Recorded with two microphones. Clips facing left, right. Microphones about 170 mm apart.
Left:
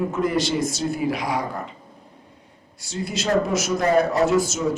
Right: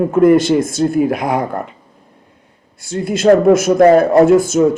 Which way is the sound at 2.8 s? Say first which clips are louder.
Right 13 dB; 55° right (ahead or behind).